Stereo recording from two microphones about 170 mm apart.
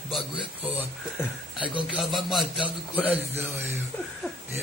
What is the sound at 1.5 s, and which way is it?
Speech, 30° left (ahead or behind).